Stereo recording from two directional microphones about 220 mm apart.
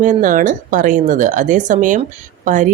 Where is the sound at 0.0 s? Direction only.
35° right (ahead or behind).